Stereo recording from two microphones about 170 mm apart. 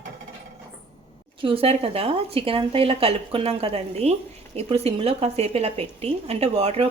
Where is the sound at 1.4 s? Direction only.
35° right (ahead or behind).